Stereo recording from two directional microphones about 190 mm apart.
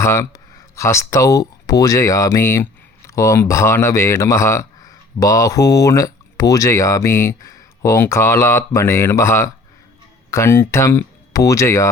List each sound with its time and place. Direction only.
0.0 s speech: 15° left (ahead or behind)